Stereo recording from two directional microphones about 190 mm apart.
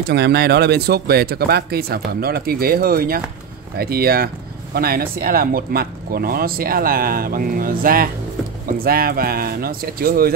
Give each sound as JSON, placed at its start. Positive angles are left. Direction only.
{"t": 0.1, "sound": "speech", "side_deg": -60}